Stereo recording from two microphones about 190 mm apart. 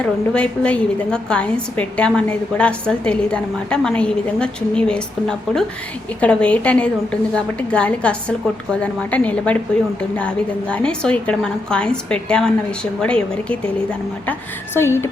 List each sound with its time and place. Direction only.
0.0 s a woman's voice: 5° left (ahead or behind)